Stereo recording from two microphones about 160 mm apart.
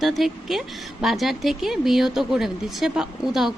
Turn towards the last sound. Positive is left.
turn(degrees=0)  # may be behind; listen again after turning